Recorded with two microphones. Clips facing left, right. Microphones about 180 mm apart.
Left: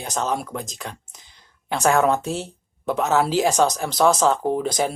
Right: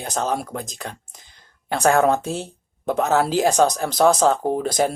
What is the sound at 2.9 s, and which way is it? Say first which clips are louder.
Speech: right 1 dB; 50° right (ahead or behind).